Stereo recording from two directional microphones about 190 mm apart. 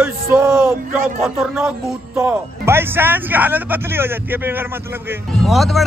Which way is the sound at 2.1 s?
10° right (ahead or behind).